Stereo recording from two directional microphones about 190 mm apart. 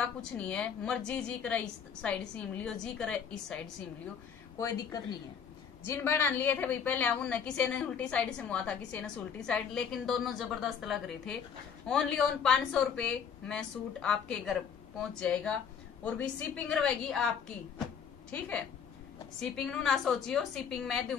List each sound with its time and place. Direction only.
0.2 s a woman's voice: 5° left (ahead or behind)
4.6 s a woman's voice: 20° left (ahead or behind)
19.5 s a woman's voice: 5° left (ahead or behind)